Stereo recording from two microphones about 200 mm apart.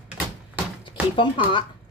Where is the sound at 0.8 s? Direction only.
25° left (ahead or behind).